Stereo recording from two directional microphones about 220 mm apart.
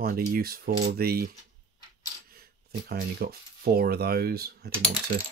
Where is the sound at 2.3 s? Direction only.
45° right (ahead or behind).